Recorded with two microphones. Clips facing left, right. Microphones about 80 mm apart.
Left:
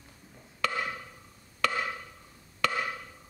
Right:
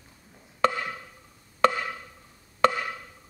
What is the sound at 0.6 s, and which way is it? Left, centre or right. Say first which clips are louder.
Wood block: right 6 dB; right.